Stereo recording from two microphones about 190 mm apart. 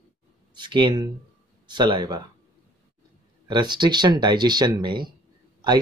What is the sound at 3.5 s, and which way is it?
A man's voice, 25° right (ahead or behind).